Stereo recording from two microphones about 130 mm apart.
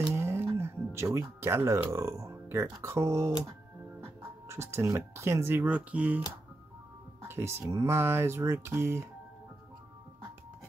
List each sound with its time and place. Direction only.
0.1 s music: 20° right (ahead or behind)
0.6 s speech: 20° right (ahead or behind)
4.5 s speech: 20° right (ahead or behind)
7.2 s speech: 20° right (ahead or behind)